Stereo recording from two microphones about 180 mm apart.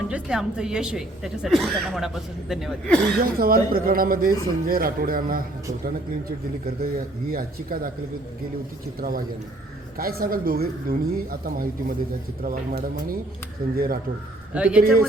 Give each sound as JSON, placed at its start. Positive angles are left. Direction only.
{"t": 0.1, "sound": "a woman's voice", "side_deg": -5}
{"t": 3.2, "sound": "speech", "side_deg": -55}
{"t": 6.7, "sound": "speech", "side_deg": -55}
{"t": 9.0, "sound": "speech", "side_deg": -55}
{"t": 14.5, "sound": "a man's voice", "side_deg": -5}